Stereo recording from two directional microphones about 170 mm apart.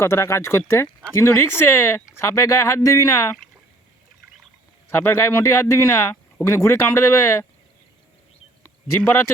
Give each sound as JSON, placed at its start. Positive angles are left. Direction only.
{"t": 0.0, "sound": "speech", "side_deg": 15}
{"t": 4.9, "sound": "speech", "side_deg": 15}